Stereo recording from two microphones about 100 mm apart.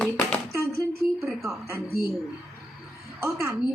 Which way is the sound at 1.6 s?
25° right (ahead or behind).